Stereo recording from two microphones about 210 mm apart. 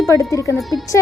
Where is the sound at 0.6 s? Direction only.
Centre (ahead or behind).